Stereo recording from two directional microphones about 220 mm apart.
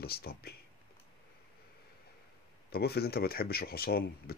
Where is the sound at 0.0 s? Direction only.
45° left (ahead or behind).